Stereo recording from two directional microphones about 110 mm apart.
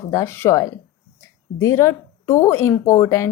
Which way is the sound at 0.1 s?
25° left (ahead or behind).